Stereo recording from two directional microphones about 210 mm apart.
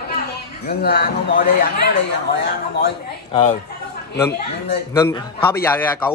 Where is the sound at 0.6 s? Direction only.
45° left (ahead or behind).